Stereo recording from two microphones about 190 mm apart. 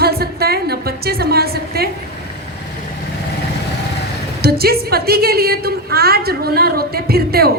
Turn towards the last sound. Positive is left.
turn(degrees=-55)  # may be behind; listen again after turning